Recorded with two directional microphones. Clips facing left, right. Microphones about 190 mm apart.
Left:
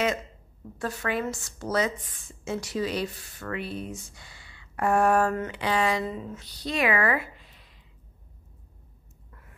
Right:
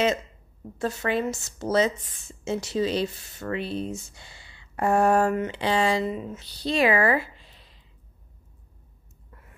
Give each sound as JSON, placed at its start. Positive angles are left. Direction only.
{"t": 0.7, "sound": "speech", "side_deg": -25}